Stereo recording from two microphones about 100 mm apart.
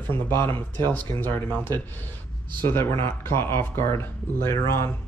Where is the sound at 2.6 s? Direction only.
25° left (ahead or behind).